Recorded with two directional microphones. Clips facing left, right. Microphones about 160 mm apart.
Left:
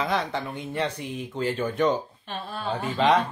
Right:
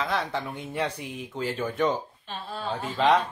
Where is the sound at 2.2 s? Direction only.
60° left (ahead or behind).